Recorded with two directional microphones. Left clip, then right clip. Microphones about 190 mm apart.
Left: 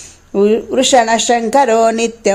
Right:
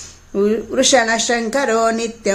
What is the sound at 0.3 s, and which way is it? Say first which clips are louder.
Speech: left 5 dB; 20° left (ahead or behind).